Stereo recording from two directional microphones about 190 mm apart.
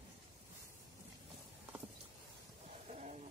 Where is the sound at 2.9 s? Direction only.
35° right (ahead or behind).